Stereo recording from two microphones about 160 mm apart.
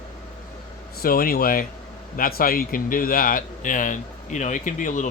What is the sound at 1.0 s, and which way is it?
A man's voice, 65° left (ahead or behind).